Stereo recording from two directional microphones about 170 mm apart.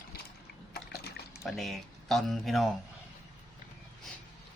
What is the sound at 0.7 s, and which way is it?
Liquid, 70° left (ahead or behind).